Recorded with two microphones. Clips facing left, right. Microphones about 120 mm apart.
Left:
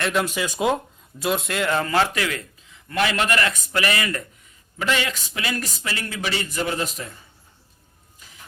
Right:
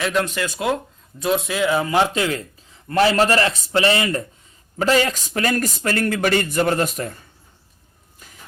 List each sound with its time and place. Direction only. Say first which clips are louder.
0.0 s speech: right 2 dB; centre (ahead or behind)
1.2 s speech: right 3 dB; centre (ahead or behind)
2.1 s speech: right 4 dB; 30° right (ahead or behind)
4.8 s speech: right 6 dB; 40° right (ahead or behind); by 7.2 s 55° right (ahead or behind)